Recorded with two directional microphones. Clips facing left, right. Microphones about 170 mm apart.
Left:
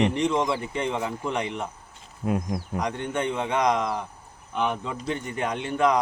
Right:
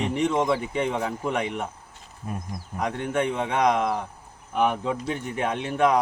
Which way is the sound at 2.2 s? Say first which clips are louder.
Left 8 dB; 70° left (ahead or behind).